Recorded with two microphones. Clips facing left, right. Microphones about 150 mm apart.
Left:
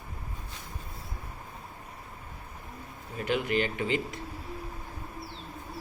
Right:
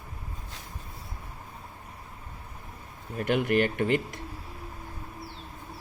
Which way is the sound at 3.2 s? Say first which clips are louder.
Right 4 dB; 55° right (ahead or behind).